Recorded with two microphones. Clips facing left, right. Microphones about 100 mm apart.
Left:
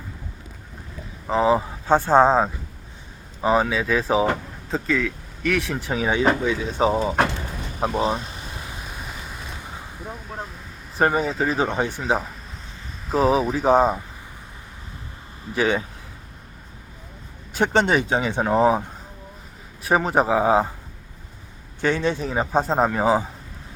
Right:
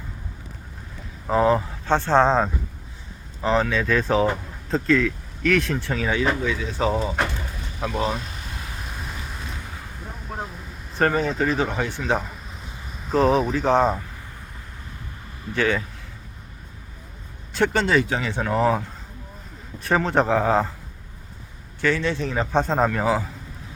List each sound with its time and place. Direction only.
1.3 s speech: 5° left (ahead or behind)
5.8 s speech: 15° left (ahead or behind)
9.0 s vehicle: 5° left (ahead or behind)
10.9 s speech: 10° left (ahead or behind)
11.5 s speech: 20° left (ahead or behind)
15.5 s speech: 20° left (ahead or behind)
17.7 s speech: 20° left (ahead or behind)
21.8 s speech: 20° left (ahead or behind)